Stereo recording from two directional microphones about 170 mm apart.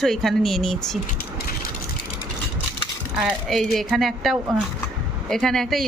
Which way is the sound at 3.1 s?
Centre (ahead or behind).